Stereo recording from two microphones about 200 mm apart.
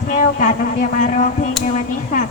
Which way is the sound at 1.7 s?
40° left (ahead or behind).